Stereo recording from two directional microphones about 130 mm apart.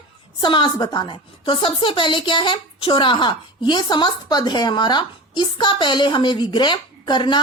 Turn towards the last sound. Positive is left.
turn(degrees=35)  # may be behind; listen again after turning